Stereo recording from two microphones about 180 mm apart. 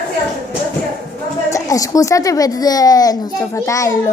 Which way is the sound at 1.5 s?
20° left (ahead or behind).